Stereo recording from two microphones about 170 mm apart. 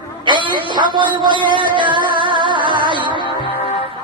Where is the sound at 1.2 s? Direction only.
30° right (ahead or behind).